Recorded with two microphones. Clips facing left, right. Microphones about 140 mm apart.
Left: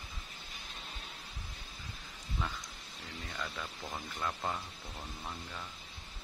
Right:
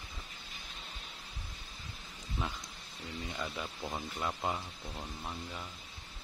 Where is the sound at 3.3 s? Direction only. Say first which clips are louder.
Right 1 dB; 20° right (ahead or behind).